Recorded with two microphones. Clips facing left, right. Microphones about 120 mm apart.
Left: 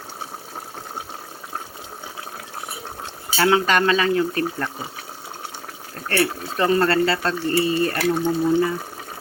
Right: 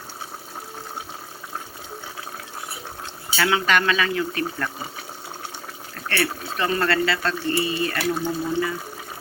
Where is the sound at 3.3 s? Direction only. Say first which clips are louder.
Left 3 dB; 30° left (ahead or behind).